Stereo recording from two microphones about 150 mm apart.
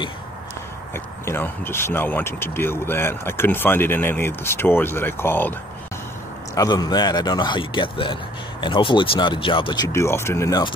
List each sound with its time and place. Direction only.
0.9 s speech: 15° left (ahead or behind)
6.5 s speech: 25° left (ahead or behind)
9.9 s speech: 15° left (ahead or behind)